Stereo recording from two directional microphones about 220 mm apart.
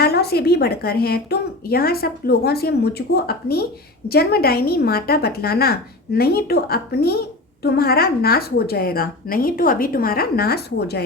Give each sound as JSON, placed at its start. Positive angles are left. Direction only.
{"t": 0.0, "sound": "a woman's voice", "side_deg": 45}